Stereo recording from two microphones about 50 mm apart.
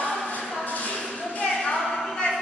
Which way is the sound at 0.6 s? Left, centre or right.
Left.